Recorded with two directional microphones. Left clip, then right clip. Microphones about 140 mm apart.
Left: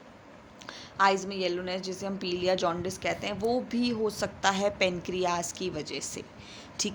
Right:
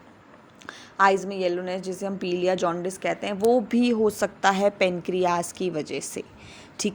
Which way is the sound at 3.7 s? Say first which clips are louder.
Right 7 dB; 60° right (ahead or behind).